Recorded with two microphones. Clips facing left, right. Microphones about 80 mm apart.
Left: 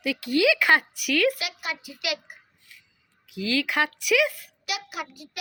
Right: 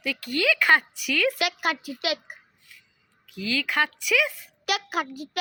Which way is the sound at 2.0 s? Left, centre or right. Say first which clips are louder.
Right 3 dB; right.